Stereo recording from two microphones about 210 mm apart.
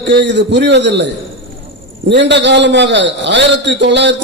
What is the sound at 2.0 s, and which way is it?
A man's voice, 55° right (ahead or behind).